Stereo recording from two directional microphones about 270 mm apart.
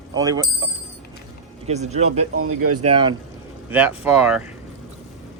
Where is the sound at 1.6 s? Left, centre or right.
Right.